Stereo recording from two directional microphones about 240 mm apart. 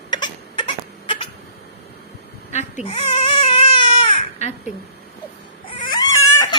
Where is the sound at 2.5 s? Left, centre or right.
Left.